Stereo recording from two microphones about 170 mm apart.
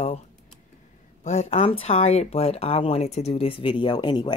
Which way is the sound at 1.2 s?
40° left (ahead or behind).